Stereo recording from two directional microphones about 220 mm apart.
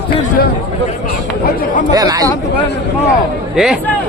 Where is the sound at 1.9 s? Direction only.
15° right (ahead or behind).